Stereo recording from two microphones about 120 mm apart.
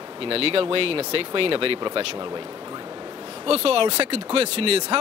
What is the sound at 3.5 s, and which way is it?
Speech, 55° right (ahead or behind).